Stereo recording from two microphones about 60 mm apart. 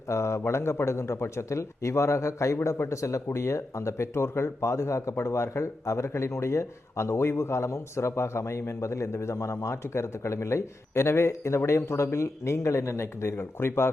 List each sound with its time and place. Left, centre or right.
0.1 s speech: left